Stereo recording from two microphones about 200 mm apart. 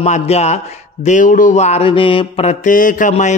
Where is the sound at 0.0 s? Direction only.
35° left (ahead or behind).